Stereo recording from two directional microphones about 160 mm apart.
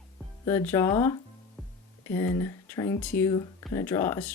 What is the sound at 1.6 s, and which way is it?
Music, 5° left (ahead or behind).